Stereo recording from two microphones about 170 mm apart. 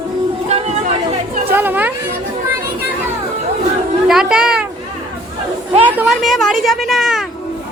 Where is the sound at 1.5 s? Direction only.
10° right (ahead or behind).